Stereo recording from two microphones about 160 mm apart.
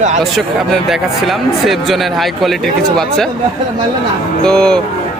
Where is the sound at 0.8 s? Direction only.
Centre (ahead or behind).